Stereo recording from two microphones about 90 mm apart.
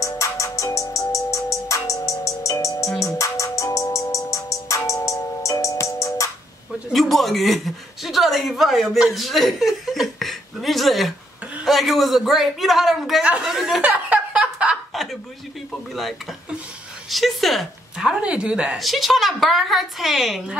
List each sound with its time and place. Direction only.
0.2 s music: 35° left (ahead or behind)
6.9 s a sound: centre (ahead or behind)
11.6 s speech: centre (ahead or behind)
13.2 s speech: 15° right (ahead or behind)
13.5 s speech: centre (ahead or behind)
13.8 s a sound: 15° right (ahead or behind)
15.7 s speech: centre (ahead or behind)
18.8 s speech: centre (ahead or behind)